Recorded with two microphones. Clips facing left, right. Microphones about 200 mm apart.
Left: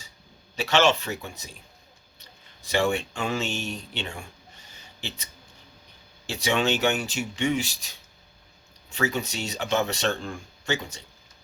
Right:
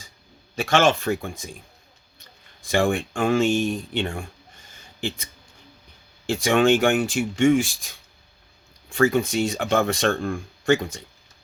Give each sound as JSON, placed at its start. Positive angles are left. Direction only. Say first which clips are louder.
{"t": 0.5, "sound": "speech", "louder": "right 2 dB", "side_deg": -50}
{"t": 2.6, "sound": "speech", "louder": "right 3 dB", "side_deg": -50}